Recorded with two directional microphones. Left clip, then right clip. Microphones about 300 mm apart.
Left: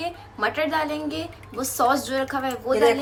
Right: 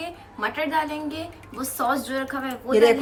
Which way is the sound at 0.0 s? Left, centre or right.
Centre.